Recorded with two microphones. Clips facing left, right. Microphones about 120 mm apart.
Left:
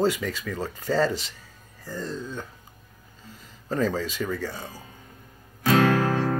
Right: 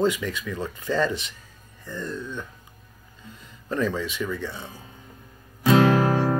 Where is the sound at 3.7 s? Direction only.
35° left (ahead or behind).